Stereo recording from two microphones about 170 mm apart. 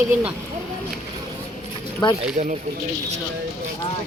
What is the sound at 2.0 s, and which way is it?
Speech, 30° left (ahead or behind).